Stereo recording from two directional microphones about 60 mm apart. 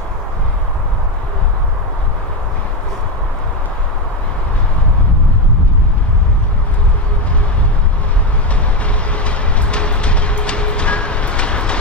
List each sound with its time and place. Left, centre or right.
9.1 s train: centre